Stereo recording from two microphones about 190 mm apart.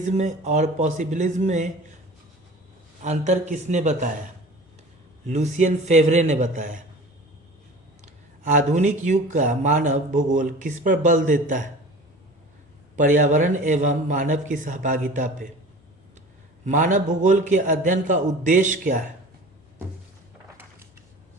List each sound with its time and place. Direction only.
0.0 s speech: 40° right (ahead or behind)
3.0 s speech: 40° right (ahead or behind)
5.2 s speech: 40° right (ahead or behind)
8.0 s speech: 40° right (ahead or behind)
13.0 s a man's voice: 40° right (ahead or behind)
16.6 s a man's voice: 40° right (ahead or behind)